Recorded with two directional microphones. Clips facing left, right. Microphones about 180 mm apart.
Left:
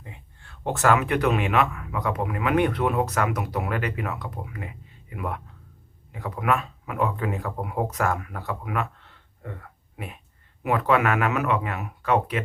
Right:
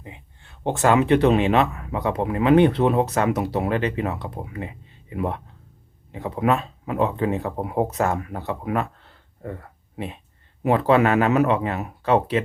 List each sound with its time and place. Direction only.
0.0 s speech: 20° right (ahead or behind)